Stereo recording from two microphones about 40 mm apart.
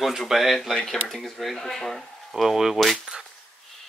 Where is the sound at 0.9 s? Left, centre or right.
Centre.